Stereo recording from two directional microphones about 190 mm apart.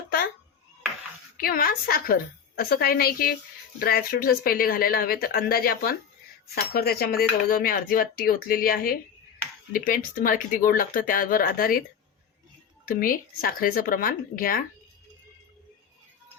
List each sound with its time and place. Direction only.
1.4 s speech: 50° left (ahead or behind)
12.9 s speech: 50° left (ahead or behind)